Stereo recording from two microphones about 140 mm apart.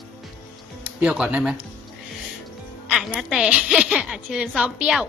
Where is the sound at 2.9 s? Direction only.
5° right (ahead or behind).